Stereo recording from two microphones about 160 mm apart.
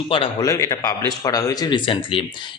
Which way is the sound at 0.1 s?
35° left (ahead or behind).